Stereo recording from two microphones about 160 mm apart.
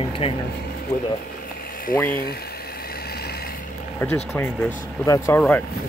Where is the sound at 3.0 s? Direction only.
80° left.